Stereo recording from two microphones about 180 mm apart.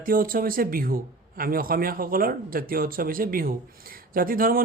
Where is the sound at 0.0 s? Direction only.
50° right (ahead or behind).